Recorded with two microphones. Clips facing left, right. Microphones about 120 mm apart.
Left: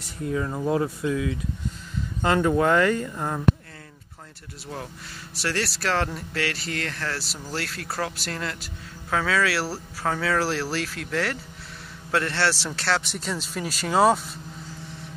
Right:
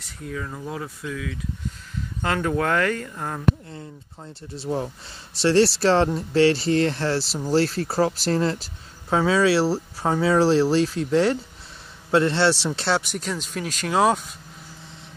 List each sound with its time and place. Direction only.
0.3 s speech: 25° left (ahead or behind)
0.6 s speech: 35° left (ahead or behind)
1.0 s speech: 25° left (ahead or behind)
2.2 s speech: 15° left (ahead or behind)
4.6 s speech: 30° right (ahead or behind)
13.0 s speech: centre (ahead or behind)